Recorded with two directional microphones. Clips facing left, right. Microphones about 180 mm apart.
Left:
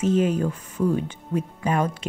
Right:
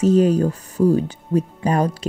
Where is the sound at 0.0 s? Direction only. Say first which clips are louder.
Right 6 dB; 40° right (ahead or behind).